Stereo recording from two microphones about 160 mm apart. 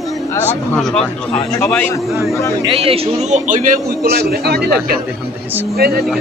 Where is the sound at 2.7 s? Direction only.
35° right (ahead or behind).